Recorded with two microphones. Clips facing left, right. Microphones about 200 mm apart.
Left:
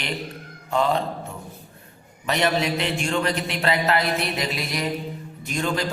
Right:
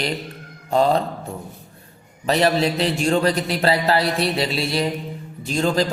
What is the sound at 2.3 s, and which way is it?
A man's voice, 35° right (ahead or behind).